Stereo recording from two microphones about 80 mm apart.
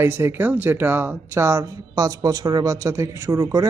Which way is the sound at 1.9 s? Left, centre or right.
Right.